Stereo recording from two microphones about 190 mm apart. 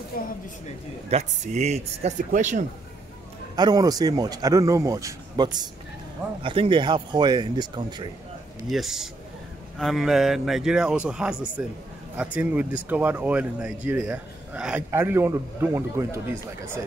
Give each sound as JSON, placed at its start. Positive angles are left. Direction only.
{"t": 0.1, "sound": "a woman's voice", "side_deg": 50}
{"t": 1.1, "sound": "speech", "side_deg": -40}
{"t": 3.5, "sound": "speech", "side_deg": -20}
{"t": 8.6, "sound": "speech", "side_deg": 0}